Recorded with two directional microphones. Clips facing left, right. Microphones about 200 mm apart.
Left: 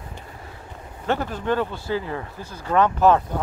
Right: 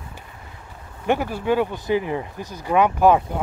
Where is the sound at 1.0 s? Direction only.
10° right (ahead or behind).